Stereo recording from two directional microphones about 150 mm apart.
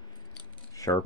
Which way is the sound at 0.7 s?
20° left (ahead or behind).